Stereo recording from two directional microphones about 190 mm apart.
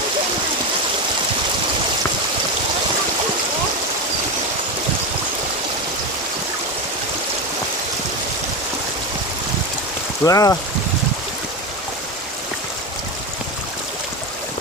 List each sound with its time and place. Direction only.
10.2 s speech: 20° left (ahead or behind)